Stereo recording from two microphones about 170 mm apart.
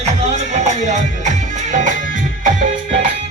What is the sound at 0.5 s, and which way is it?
Music, 45° right (ahead or behind).